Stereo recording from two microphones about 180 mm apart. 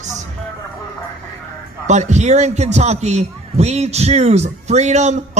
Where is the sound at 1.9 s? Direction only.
40° right (ahead or behind).